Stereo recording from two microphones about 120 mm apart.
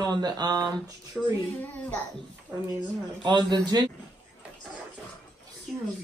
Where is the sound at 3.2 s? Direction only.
35° right (ahead or behind).